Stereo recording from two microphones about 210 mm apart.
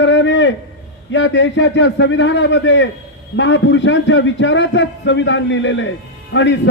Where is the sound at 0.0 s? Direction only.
60° left (ahead or behind).